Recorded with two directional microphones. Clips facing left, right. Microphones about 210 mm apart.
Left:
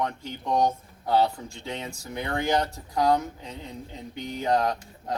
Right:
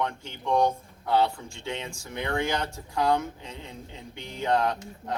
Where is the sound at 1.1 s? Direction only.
35° left (ahead or behind).